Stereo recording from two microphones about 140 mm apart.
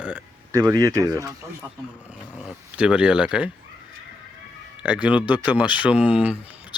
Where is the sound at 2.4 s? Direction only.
5° right (ahead or behind).